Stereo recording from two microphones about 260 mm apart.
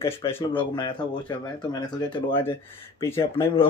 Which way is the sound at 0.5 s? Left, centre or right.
Centre.